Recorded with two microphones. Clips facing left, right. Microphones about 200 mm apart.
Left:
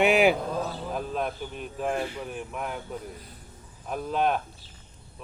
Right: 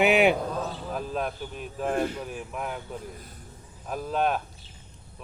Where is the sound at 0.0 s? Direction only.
Centre (ahead or behind).